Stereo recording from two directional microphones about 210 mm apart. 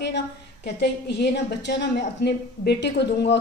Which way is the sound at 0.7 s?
50° left (ahead or behind).